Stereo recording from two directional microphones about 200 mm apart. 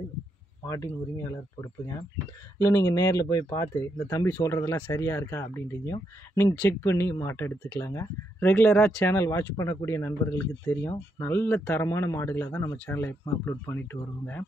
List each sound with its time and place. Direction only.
0.7 s speech: 15° left (ahead or behind)